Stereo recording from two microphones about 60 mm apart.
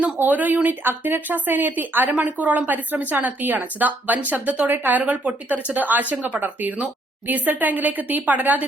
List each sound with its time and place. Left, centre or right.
0.2 s speech: right